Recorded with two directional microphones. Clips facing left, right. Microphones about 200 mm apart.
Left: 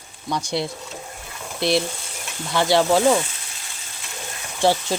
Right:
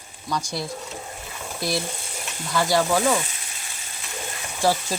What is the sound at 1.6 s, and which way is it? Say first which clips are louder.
Frying: left 6 dB; 25° left (ahead or behind).